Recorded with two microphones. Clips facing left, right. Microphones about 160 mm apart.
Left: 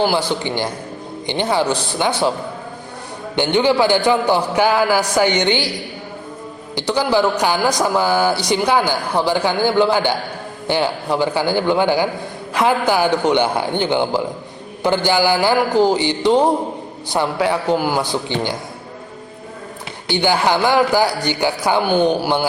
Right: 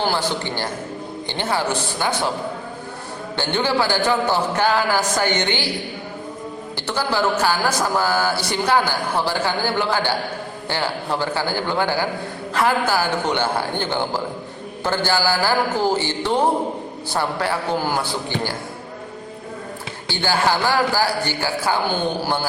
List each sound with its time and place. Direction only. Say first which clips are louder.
0.0 s speech: left 4 dB; 10° left (ahead or behind)
3.3 s speech: left 6 dB; 15° left (ahead or behind)
6.7 s speech: left 6 dB; 15° left (ahead or behind)
20.1 s speech: left 4 dB; 15° left (ahead or behind)